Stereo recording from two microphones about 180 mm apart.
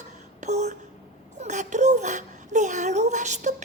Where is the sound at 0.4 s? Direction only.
40° right (ahead or behind).